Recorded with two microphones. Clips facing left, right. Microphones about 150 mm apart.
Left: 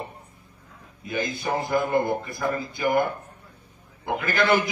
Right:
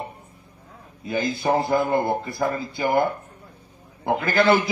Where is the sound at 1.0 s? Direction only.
30° right (ahead or behind).